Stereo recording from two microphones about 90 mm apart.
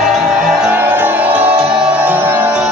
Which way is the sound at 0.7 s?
20° right (ahead or behind).